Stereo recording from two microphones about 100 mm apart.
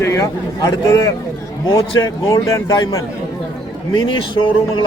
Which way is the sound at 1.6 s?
50° left (ahead or behind).